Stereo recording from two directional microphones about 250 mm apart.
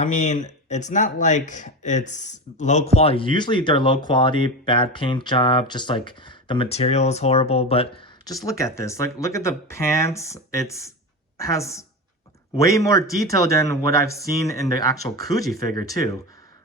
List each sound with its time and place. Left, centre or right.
0.0 s speech: left; by 16.1 s centre